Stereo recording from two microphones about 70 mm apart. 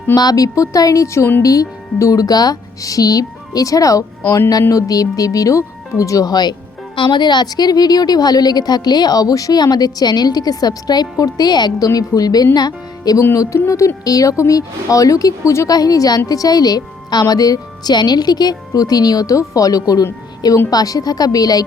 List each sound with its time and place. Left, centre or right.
0.2 s a woman's voice: left
1.4 s a woman's voice: left
11.9 s a woman's voice: left
13.3 s a woman's voice: left